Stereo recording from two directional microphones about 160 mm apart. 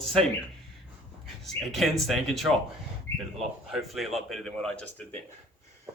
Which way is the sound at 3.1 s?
15° left (ahead or behind).